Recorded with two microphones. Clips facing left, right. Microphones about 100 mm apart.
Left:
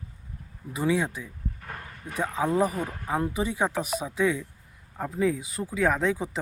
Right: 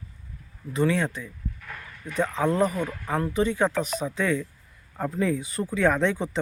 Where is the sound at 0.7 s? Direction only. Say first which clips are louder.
Right 2 dB; 10° left (ahead or behind).